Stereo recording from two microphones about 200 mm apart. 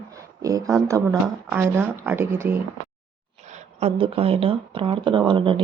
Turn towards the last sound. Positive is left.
turn(degrees=-25)  # may be behind; listen again after turning